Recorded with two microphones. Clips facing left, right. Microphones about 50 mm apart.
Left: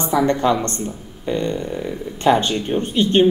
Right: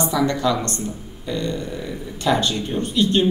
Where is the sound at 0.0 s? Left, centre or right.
Left.